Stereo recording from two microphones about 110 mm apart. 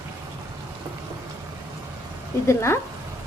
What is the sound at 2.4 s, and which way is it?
Speech, 25° left (ahead or behind).